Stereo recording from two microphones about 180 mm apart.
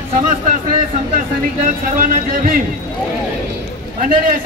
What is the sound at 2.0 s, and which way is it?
Speech, 50° right (ahead or behind).